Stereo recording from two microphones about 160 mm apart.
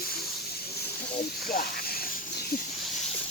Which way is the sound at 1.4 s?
65° left (ahead or behind).